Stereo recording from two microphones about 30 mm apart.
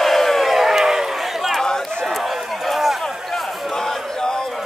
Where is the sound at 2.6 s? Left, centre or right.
Centre.